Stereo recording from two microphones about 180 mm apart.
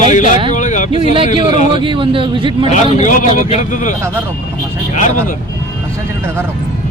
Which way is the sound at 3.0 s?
40° left (ahead or behind).